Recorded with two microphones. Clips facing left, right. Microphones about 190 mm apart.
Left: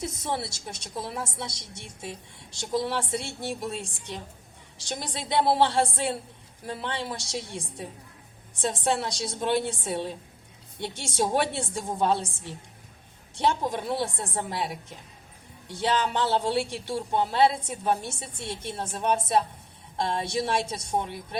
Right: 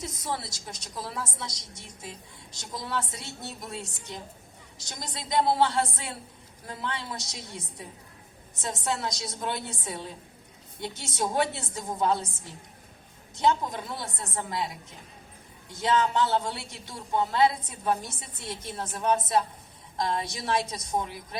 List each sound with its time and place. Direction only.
0.0 s a woman's voice: 25° left (ahead or behind)
11.0 s a woman's voice: 30° left (ahead or behind)
13.3 s a woman's voice: 30° left (ahead or behind)
15.7 s a woman's voice: 30° left (ahead or behind)